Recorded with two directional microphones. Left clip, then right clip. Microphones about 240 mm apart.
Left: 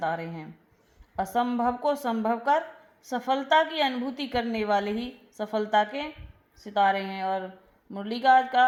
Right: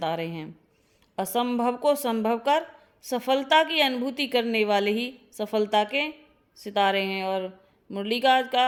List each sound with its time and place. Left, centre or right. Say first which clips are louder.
0.0 s a woman's voice: right 1 dB; right